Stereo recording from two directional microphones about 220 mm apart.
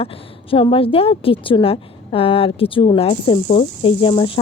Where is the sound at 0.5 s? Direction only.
25° left (ahead or behind).